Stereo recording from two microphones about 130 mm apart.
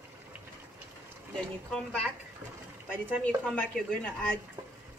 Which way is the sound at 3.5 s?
5° left (ahead or behind).